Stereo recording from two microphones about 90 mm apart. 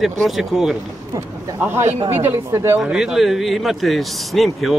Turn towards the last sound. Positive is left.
turn(degrees=0)  # may be behind; listen again after turning